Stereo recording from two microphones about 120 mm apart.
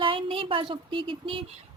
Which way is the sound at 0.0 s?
45° right (ahead or behind).